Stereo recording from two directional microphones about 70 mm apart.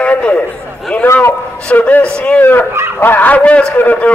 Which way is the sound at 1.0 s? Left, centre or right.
Left.